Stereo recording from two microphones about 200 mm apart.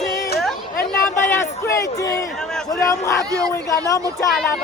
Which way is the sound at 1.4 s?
15° left (ahead or behind).